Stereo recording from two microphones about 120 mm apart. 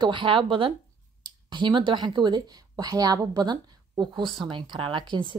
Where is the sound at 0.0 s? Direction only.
45° right (ahead or behind).